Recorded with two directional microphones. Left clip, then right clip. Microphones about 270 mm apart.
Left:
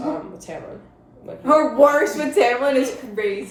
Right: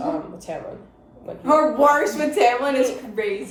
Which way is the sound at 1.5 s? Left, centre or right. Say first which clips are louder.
Left 1 dB; centre.